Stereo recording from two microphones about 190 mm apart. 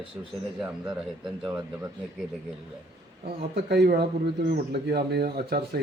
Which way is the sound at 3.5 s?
60° right (ahead or behind).